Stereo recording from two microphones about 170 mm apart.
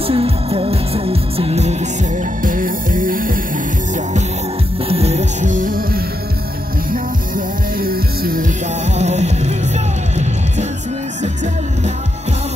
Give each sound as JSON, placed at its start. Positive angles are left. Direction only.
{"t": 0.0, "sound": "music", "side_deg": -35}
{"t": 2.4, "sound": "music", "side_deg": -55}
{"t": 4.8, "sound": "music", "side_deg": -35}
{"t": 6.9, "sound": "music", "side_deg": -60}
{"t": 8.9, "sound": "music", "side_deg": -40}